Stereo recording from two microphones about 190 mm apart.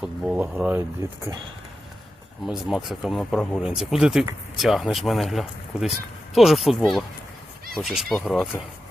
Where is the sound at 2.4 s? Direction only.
Centre (ahead or behind).